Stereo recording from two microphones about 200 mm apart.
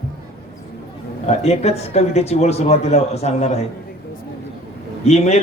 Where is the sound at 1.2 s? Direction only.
35° left (ahead or behind).